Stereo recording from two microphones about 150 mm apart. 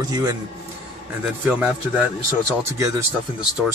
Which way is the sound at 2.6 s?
20° right (ahead or behind).